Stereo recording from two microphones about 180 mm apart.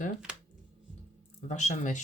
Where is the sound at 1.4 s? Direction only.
40° left (ahead or behind).